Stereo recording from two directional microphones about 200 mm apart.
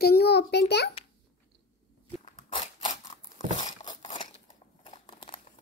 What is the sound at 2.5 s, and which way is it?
Scissors, 25° left (ahead or behind).